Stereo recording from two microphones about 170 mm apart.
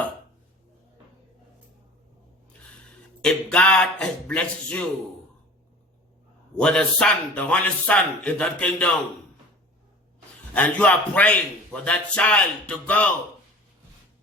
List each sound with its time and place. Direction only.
3.2 s a man's voice: 5° left (ahead or behind)
6.6 s a man's voice: 5° left (ahead or behind)
10.5 s a man's voice: 10° left (ahead or behind)